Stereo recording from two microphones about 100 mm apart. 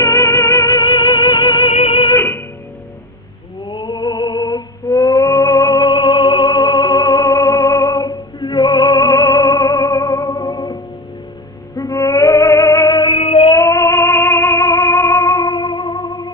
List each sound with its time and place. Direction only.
0.0 s music: 30° left (ahead or behind)
0.7 s music: 50° left (ahead or behind)
1.7 s music: 75° left (ahead or behind); by 2.1 s 60° left (ahead or behind)
2.1 s music: 25° left (ahead or behind)
3.7 s music: 45° left (ahead or behind)
13.1 s female singing: 75° left (ahead or behind)
13.5 s music: 30° left (ahead or behind); by 16.3 s 45° left (ahead or behind)